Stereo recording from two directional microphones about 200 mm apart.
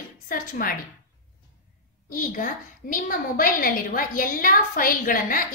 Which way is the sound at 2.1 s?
45° left (ahead or behind).